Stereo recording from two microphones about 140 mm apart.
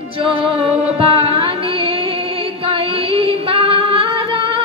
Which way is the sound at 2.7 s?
40° right (ahead or behind).